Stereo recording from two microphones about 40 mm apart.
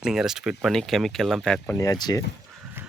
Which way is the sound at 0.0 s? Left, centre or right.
Centre.